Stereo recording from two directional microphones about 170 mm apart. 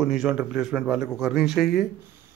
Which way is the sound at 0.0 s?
Centre (ahead or behind).